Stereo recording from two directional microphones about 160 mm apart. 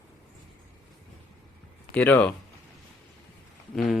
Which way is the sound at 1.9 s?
10° left (ahead or behind).